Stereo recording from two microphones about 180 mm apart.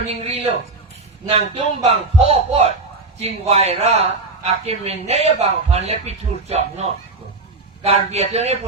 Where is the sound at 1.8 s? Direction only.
40° right (ahead or behind).